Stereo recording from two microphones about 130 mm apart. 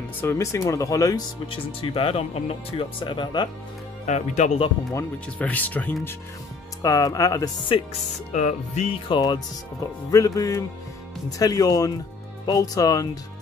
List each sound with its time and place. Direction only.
0.2 s speech: 20° left (ahead or behind)
1.5 s speech: 45° left (ahead or behind)
3.0 s speech: 35° left (ahead or behind)
4.0 s speech: 65° left (ahead or behind)
5.4 s speech: 10° left (ahead or behind)
6.8 s speech: 25° left (ahead or behind)
8.3 s music: 70° left (ahead or behind)
9.1 s speech: 35° left (ahead or behind)